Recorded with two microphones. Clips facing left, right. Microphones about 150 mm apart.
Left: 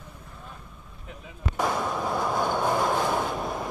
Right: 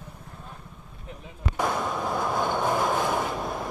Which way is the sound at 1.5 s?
Centre (ahead or behind).